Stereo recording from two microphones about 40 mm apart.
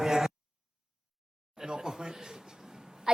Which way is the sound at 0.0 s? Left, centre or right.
Centre.